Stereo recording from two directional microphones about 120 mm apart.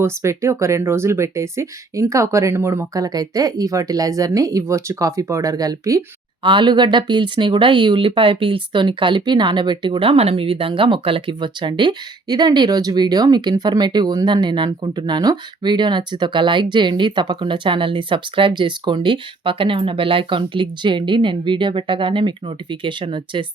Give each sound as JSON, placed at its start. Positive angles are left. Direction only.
{"t": 0.0, "sound": "speech", "side_deg": -25}
{"t": 3.0, "sound": "speech", "side_deg": -30}
{"t": 6.4, "sound": "speech", "side_deg": -40}